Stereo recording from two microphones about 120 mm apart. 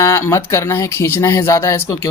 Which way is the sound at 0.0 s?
25° left (ahead or behind).